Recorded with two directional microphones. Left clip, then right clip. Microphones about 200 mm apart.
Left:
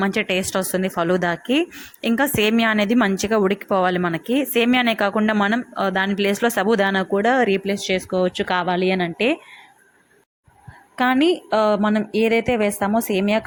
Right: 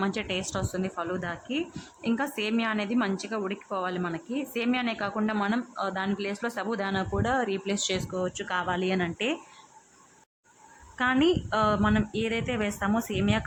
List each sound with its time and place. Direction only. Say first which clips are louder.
0.0 s speech: left 9 dB; 25° left (ahead or behind)
10.9 s speech: left 7 dB; 25° left (ahead or behind)